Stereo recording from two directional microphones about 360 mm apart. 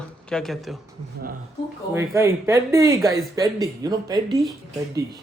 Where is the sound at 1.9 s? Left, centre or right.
Centre.